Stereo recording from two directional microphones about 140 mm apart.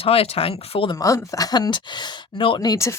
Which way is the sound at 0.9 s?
25° left (ahead or behind).